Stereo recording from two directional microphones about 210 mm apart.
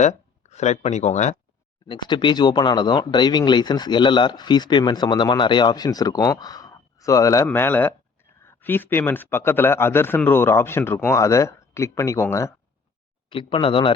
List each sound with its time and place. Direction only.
0.0 s speech: 35° left (ahead or behind)
1.9 s speech: 20° left (ahead or behind)
13.3 s speech: 25° left (ahead or behind)